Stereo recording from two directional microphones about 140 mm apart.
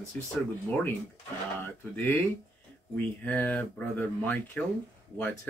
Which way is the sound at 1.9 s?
15° left (ahead or behind).